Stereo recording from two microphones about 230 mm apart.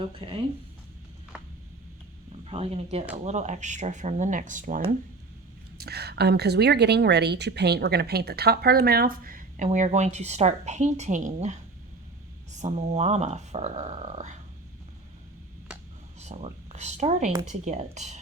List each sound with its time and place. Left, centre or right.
0.2 s speech: right
2.5 s speech: right
5.8 s a woman's voice: right
16.2 s speech: right